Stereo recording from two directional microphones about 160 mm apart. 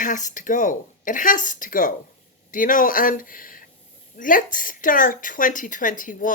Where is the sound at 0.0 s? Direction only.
55° left (ahead or behind).